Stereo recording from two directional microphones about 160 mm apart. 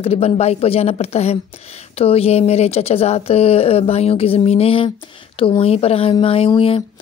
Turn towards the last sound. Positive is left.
turn(degrees=35)  # may be behind; listen again after turning